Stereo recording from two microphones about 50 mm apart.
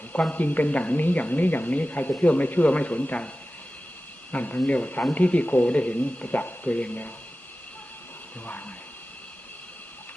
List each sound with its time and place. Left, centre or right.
0.3 s speech: left
4.3 s speech: left